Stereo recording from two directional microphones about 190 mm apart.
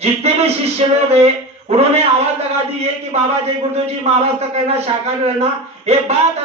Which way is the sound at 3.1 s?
35° right (ahead or behind).